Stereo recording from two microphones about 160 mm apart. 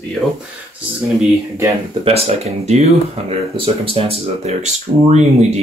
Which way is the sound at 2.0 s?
40° right (ahead or behind).